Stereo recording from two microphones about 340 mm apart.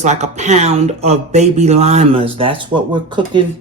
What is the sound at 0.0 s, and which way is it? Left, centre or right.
Speech, centre.